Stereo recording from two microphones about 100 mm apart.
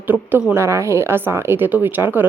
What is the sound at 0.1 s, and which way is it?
Speech, 15° right (ahead or behind).